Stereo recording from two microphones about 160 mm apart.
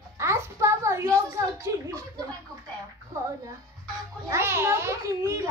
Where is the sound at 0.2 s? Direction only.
15° right (ahead or behind).